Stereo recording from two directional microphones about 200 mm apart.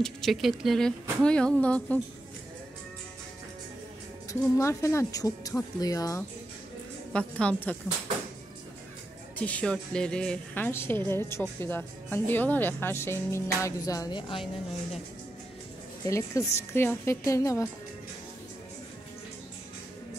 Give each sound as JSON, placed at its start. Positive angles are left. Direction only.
{"t": 0.0, "sound": "speech", "side_deg": 0}
{"t": 4.3, "sound": "a woman's voice", "side_deg": 15}
{"t": 7.1, "sound": "speech", "side_deg": 5}
{"t": 9.4, "sound": "a woman's voice", "side_deg": 5}
{"t": 16.1, "sound": "a woman's voice", "side_deg": 15}